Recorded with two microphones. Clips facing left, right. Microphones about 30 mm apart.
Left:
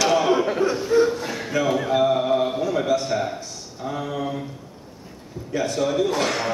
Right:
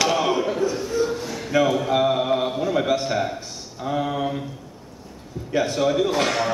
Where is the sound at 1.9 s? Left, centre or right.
Right.